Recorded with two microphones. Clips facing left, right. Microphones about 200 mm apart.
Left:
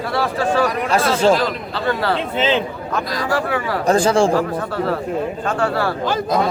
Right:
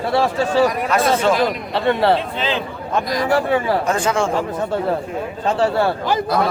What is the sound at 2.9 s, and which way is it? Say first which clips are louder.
Speech: right 4 dB; 25° right (ahead or behind).